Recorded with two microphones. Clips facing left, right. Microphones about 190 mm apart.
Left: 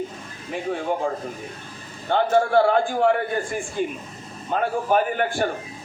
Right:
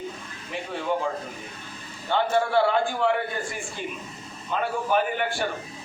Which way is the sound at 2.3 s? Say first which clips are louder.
Left 5 dB; 50° left (ahead or behind).